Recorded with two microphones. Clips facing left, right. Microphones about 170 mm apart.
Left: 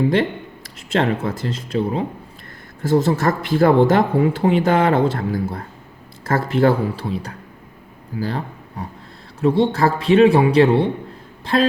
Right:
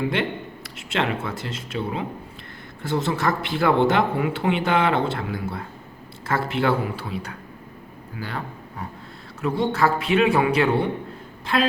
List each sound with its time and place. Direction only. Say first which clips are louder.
0.1 s speech: left 6 dB; 40° left (ahead or behind)